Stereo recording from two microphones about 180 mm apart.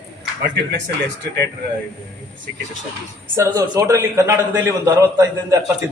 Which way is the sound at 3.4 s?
20° right (ahead or behind).